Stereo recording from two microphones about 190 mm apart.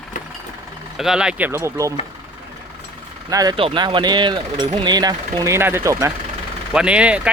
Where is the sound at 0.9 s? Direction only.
5° right (ahead or behind).